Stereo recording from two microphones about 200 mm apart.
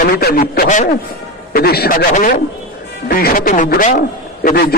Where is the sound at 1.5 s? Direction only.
50° left (ahead or behind).